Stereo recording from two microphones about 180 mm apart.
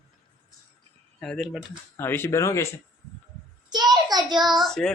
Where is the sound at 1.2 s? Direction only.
5° left (ahead or behind).